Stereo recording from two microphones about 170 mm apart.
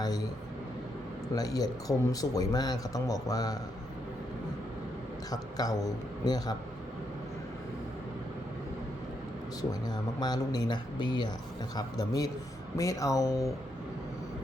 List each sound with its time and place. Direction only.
1.4 s speech: 20° left (ahead or behind)
5.3 s speech: 20° left (ahead or behind)
9.6 s speech: 25° left (ahead or behind)